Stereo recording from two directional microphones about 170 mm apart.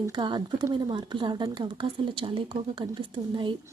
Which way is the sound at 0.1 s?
25° right (ahead or behind).